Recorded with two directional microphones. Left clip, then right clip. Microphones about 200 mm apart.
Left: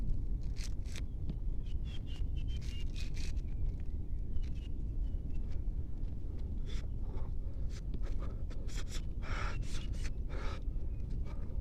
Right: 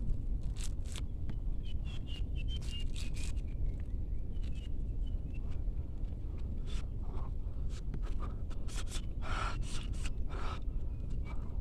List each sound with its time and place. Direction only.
8.7 s gasp: centre (ahead or behind)